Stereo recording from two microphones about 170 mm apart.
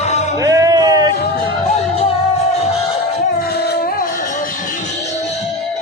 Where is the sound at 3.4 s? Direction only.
70° left (ahead or behind); by 5.3 s 40° left (ahead or behind).